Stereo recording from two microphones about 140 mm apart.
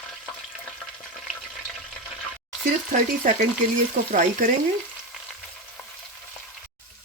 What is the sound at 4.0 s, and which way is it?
Frying, 65° right (ahead or behind).